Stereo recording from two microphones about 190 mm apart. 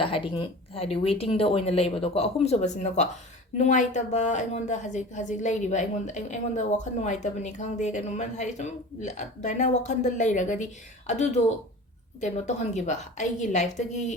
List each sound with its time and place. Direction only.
0.0 s a woman's voice: 30° left (ahead or behind)